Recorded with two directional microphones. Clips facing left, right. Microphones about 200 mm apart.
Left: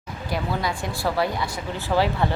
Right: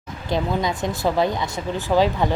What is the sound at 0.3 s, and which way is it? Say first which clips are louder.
Speech: right 4 dB; 20° right (ahead or behind).